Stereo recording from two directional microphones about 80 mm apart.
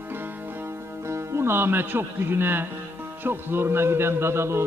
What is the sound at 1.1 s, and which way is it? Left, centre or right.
Speech, right.